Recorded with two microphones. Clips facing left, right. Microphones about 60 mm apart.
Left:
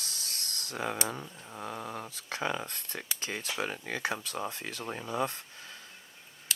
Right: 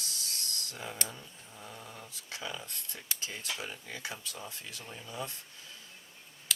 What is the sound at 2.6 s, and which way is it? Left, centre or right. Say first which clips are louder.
Speech: left 5 dB; left.